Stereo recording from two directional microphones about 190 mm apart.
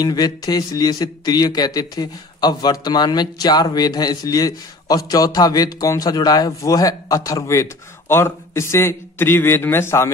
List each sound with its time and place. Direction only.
0.0 s a man's voice: 20° left (ahead or behind)